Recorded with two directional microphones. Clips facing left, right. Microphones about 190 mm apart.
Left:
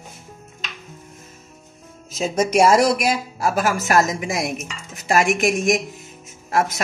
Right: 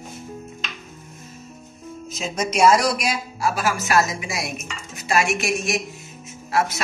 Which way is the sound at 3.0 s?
50° left (ahead or behind).